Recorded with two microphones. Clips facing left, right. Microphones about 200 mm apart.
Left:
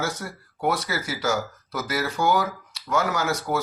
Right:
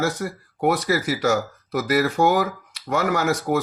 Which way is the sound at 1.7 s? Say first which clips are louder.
Right 7 dB; 60° right (ahead or behind).